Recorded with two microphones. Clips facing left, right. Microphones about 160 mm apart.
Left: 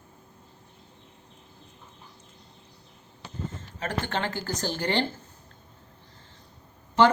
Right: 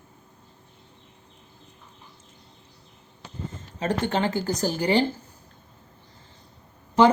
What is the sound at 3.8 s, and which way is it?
Speech, 15° right (ahead or behind).